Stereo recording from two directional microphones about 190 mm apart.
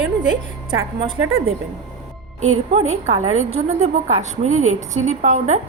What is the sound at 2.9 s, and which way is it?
A woman's voice, 35° right (ahead or behind).